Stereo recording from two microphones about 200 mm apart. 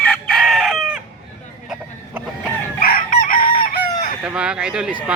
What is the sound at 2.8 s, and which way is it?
Chicken, 45° left (ahead or behind).